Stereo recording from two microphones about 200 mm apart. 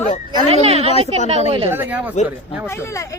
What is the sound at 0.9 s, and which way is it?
Speech, 30° left (ahead or behind).